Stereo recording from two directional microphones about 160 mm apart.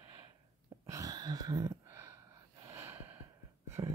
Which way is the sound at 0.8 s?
20° right (ahead or behind).